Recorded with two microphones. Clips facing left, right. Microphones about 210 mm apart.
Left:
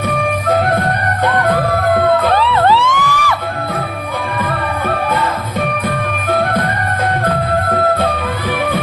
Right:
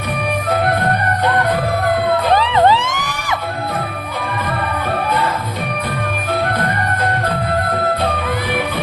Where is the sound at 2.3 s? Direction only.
15° right (ahead or behind).